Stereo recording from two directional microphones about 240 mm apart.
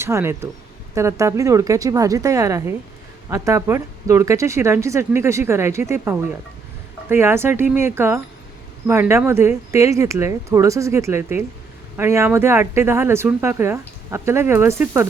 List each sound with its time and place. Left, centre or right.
0.0 s speech: centre